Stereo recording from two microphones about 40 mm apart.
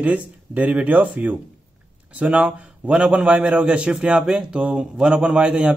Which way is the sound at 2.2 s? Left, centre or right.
Right.